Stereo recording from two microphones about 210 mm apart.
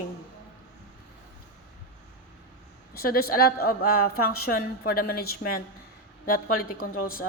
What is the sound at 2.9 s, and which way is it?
A woman's voice, 45° left (ahead or behind).